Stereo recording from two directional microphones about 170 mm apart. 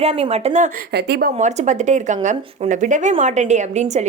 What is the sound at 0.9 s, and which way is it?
Speech, 75° right (ahead or behind).